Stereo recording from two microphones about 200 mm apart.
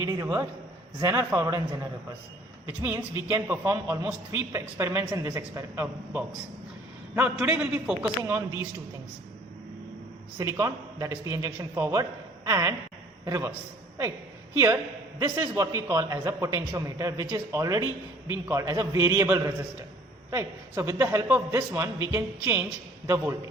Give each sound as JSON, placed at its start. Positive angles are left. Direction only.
{"t": 0.0, "sound": "a man's voice", "side_deg": -15}
{"t": 2.6, "sound": "a man's voice", "side_deg": -10}
{"t": 10.3, "sound": "a man's voice", "side_deg": -15}
{"t": 15.2, "sound": "a man's voice", "side_deg": -15}